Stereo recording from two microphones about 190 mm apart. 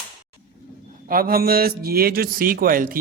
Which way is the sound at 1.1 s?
50° right (ahead or behind).